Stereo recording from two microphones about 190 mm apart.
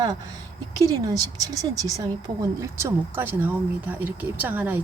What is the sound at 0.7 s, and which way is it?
Speech, 20° right (ahead or behind).